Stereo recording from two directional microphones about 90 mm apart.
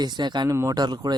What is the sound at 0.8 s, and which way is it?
Speech, 50° right (ahead or behind).